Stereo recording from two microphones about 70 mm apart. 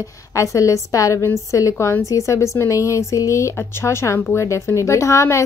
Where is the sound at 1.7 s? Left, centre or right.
Left.